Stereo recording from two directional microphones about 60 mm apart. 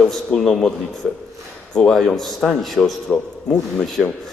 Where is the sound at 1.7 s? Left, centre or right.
Centre.